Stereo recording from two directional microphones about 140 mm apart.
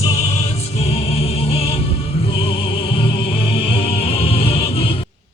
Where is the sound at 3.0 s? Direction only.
45° left (ahead or behind).